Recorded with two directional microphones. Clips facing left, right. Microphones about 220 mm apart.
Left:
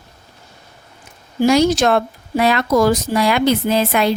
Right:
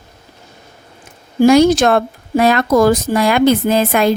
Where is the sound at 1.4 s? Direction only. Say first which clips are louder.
Right 5 dB; 55° right (ahead or behind).